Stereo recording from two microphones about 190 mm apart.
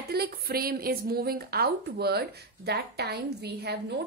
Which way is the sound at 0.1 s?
55° right (ahead or behind).